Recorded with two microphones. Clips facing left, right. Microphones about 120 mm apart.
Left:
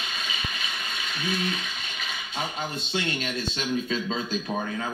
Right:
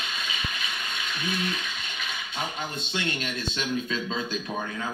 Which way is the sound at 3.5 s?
30° left (ahead or behind).